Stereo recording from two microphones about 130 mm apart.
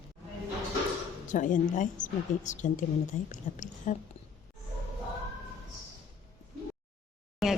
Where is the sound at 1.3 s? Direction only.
80° left.